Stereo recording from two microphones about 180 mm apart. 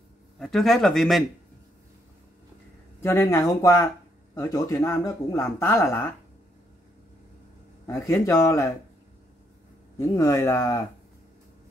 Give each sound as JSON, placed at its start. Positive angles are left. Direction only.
{"t": 0.4, "sound": "speech", "side_deg": 0}
{"t": 3.0, "sound": "speech", "side_deg": 15}
{"t": 7.8, "sound": "speech", "side_deg": 15}
{"t": 9.9, "sound": "speech", "side_deg": 15}